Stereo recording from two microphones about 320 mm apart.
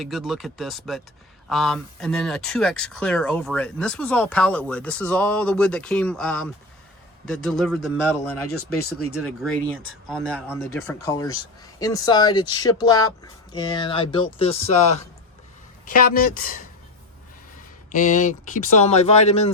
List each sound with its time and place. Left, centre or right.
0.0 s speech: centre
8.4 s speech: left
9.2 s speech: centre; by 16.6 s left
17.9 s speech: left